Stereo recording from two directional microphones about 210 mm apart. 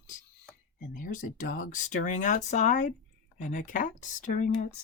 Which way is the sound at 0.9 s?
40° left (ahead or behind).